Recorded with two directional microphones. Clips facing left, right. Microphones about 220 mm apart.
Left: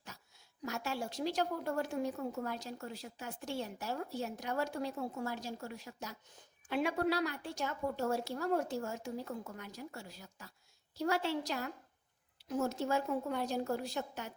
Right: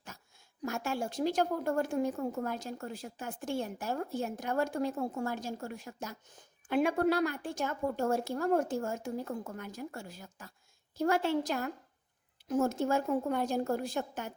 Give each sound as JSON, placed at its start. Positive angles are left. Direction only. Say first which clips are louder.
{"t": 0.6, "sound": "a woman's voice", "louder": "right 4 dB", "side_deg": -50}